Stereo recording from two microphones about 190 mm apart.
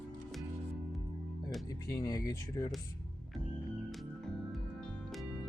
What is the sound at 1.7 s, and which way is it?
Speech, 20° left (ahead or behind).